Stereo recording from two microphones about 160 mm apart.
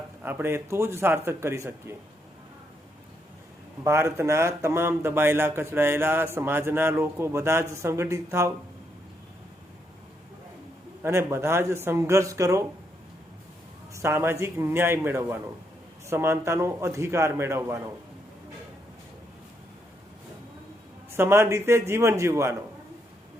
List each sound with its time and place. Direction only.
0.2 s speech: 10° right (ahead or behind)
3.8 s speech: 15° right (ahead or behind)
11.0 s speech: 15° right (ahead or behind)
13.9 s speech: 15° right (ahead or behind)
21.2 s speech: 15° right (ahead or behind)